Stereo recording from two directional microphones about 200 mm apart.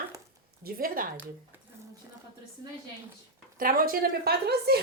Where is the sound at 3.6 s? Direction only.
45° right (ahead or behind).